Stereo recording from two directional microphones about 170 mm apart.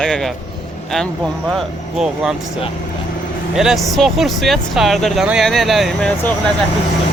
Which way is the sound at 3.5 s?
Centre (ahead or behind).